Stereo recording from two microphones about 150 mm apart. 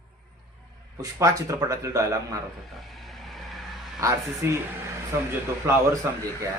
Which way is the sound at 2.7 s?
Centre (ahead or behind).